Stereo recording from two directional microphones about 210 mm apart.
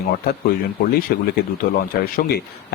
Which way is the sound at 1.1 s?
45° left (ahead or behind).